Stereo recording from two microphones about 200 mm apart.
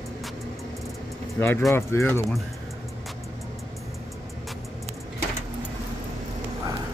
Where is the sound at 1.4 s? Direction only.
10° left (ahead or behind).